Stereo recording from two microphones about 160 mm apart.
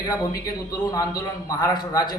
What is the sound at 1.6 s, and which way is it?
Speech, 25° left (ahead or behind).